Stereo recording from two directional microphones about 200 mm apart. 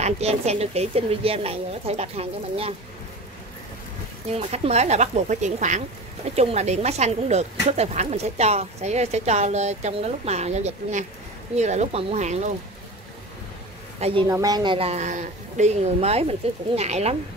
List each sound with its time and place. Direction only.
0.0 s speech: 30° right (ahead or behind)
4.3 s speech: 30° right (ahead or behind)
13.9 s a woman's voice: 30° right (ahead or behind)
14.2 s speech: 20° right (ahead or behind)